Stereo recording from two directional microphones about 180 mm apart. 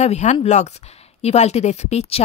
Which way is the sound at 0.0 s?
40° left (ahead or behind).